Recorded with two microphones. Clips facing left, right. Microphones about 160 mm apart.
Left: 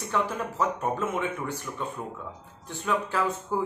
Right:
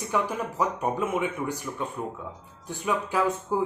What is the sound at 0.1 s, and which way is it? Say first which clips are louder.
Speech: right 1 dB; 15° right (ahead or behind).